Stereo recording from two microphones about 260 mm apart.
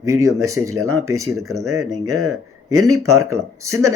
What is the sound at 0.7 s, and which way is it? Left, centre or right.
Speech, right.